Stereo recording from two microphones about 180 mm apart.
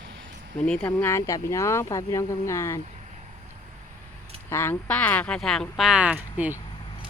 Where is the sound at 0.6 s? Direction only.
5° left (ahead or behind).